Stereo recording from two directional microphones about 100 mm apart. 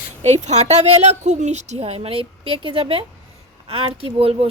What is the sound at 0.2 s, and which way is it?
A woman's voice, 90° right.